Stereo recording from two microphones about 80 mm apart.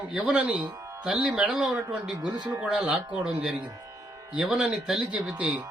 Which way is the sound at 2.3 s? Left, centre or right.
Right.